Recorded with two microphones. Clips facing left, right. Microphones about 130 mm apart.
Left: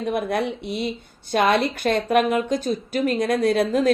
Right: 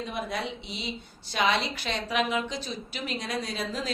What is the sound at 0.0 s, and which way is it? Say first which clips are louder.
A woman's voice: left 9 dB; 55° left (ahead or behind).